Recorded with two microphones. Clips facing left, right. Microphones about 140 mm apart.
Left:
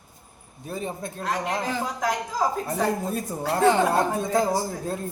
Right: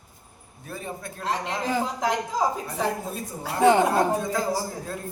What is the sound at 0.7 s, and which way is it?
Speech, 20° left (ahead or behind).